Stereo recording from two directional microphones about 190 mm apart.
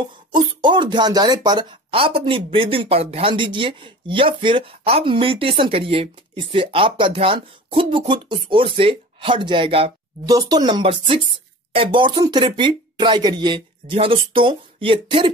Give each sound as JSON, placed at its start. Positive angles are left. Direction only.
{"t": 0.3, "sound": "speech", "side_deg": -25}